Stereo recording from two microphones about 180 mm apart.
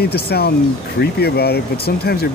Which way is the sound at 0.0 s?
60° left (ahead or behind).